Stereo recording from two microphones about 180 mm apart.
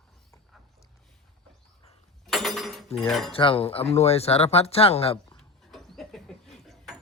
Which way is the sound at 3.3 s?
30° left (ahead or behind).